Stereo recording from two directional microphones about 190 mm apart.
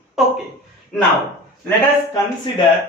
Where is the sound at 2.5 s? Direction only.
25° left (ahead or behind).